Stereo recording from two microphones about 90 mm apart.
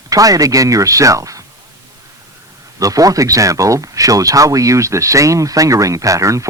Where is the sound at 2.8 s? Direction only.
40° right (ahead or behind).